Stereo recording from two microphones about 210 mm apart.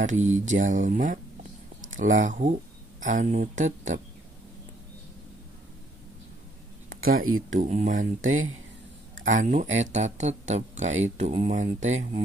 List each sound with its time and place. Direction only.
0.2 s speech: 35° right (ahead or behind)
7.2 s speech: 80° right
7.6 s speech: 35° right (ahead or behind)
9.3 s speech: 35° right (ahead or behind)